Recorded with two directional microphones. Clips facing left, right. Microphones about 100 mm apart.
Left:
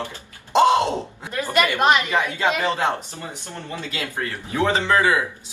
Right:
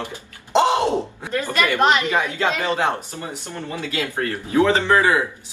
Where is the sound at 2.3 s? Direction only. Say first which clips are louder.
Left 1 dB; 20° left (ahead or behind).